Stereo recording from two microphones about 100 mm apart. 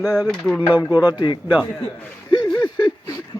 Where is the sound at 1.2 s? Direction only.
55° left (ahead or behind).